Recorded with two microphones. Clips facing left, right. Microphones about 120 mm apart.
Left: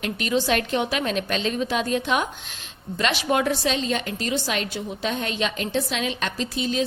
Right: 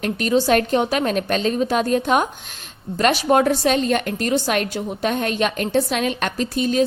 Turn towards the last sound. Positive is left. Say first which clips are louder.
# right 6 dB
turn(degrees=-50)  # may be behind; listen again after turning